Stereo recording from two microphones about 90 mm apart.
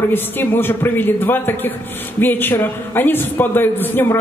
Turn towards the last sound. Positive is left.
turn(degrees=25)  # may be behind; listen again after turning